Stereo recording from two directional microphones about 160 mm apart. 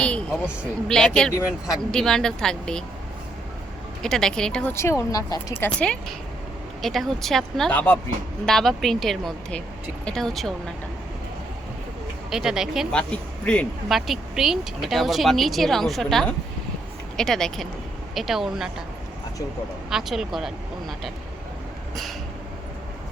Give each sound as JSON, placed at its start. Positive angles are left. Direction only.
{"t": 0.0, "sound": "a sound", "side_deg": 5}
{"t": 0.9, "sound": "speech", "side_deg": 5}
{"t": 4.0, "sound": "speech", "side_deg": 5}
{"t": 4.7, "sound": "speech", "side_deg": 15}
{"t": 5.6, "sound": "speech", "side_deg": 5}
{"t": 12.3, "sound": "speech", "side_deg": -5}
{"t": 19.9, "sound": "speech", "side_deg": 0}